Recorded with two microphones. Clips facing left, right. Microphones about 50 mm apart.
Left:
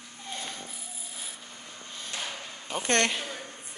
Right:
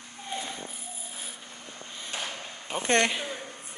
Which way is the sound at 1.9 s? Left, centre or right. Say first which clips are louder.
Right 1 dB; right.